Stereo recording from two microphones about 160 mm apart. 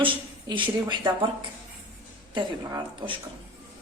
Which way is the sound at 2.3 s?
30° right (ahead or behind).